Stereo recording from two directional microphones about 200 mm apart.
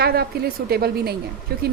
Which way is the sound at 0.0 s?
50° right (ahead or behind).